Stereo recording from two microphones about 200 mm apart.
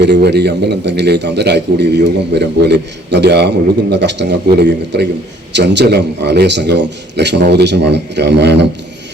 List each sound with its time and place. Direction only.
0.0 s a man's voice: 60° right (ahead or behind)